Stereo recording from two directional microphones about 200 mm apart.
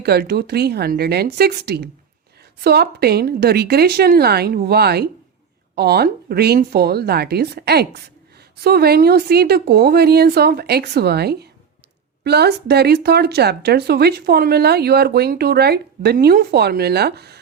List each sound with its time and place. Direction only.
0.0 s speech: 55° right (ahead or behind)